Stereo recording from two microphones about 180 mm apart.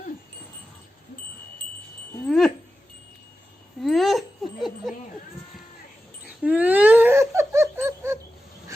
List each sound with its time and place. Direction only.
2.2 s dog: 5° left (ahead or behind)
3.8 s a sound: centre (ahead or behind)
6.4 s laughter: 10° right (ahead or behind)